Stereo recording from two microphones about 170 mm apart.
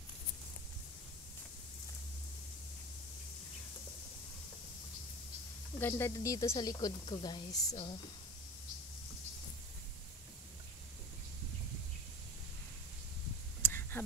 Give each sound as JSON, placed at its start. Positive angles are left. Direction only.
{"t": 5.8, "sound": "speech", "side_deg": 15}
{"t": 13.6, "sound": "whispering", "side_deg": 15}